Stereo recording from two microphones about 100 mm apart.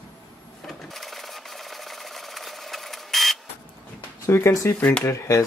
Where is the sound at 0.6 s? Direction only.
Centre (ahead or behind).